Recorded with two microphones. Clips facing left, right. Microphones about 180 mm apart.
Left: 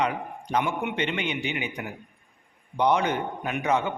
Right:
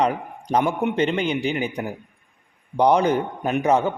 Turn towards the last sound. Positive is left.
turn(degrees=-35)  # may be behind; listen again after turning